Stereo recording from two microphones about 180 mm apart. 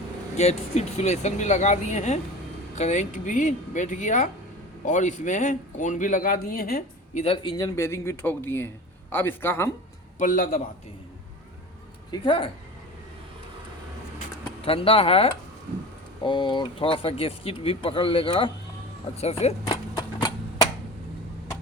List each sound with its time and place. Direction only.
0.3 s a man's voice: 35° left (ahead or behind); by 7.2 s 55° left (ahead or behind)
7.2 s speech: 30° left (ahead or behind); by 9.6 s 10° left (ahead or behind)
10.2 s a man's voice: 50° left (ahead or behind)
12.1 s speech: 25° left (ahead or behind)
14.6 s speech: 30° left (ahead or behind)
19.6 s a sound: 20° left (ahead or behind)